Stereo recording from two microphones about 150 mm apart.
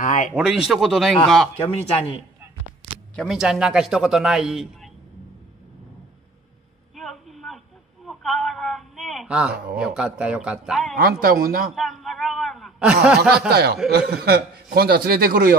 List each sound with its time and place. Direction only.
0.0 s a sound: 55° left (ahead or behind)
0.3 s a man's voice: 5° right (ahead or behind)
1.6 s speech: 40° left (ahead or behind)
3.2 s a man's voice: 5° right (ahead or behind)
7.0 s a sound: centre (ahead or behind)
9.8 s speech: 5° right (ahead or behind)
11.0 s speech: 80° right
11.7 s a sound: centre (ahead or behind)
13.5 s a man's voice: 90° right